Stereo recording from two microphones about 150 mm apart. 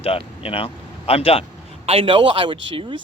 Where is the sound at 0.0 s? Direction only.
40° left (ahead or behind).